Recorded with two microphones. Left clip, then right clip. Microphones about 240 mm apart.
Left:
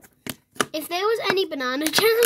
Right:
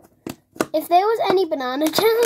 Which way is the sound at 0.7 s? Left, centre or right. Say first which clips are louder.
Right 9 dB; left.